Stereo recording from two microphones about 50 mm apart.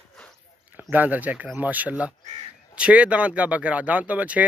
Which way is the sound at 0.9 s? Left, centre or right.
Right.